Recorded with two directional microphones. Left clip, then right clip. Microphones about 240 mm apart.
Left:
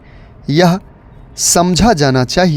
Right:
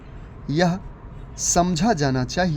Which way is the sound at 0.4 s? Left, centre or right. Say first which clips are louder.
Left 10 dB; left.